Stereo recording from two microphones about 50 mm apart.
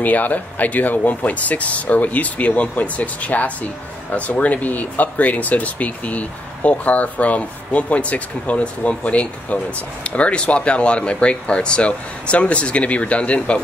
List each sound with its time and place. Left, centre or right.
0.0 s speech: left